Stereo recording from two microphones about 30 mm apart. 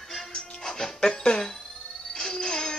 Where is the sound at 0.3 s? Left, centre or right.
Left.